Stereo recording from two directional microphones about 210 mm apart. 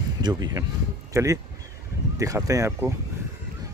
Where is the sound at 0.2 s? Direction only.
20° right (ahead or behind).